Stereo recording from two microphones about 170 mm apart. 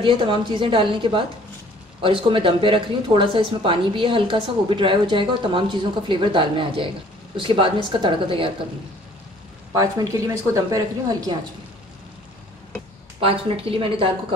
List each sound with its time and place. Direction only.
0.0 s a woman's voice: 30° right (ahead or behind)
9.8 s a woman's voice: 20° right (ahead or behind)
13.2 s speech: 30° right (ahead or behind)